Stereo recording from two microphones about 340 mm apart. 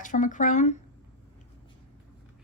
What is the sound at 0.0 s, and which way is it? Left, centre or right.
Speech, left.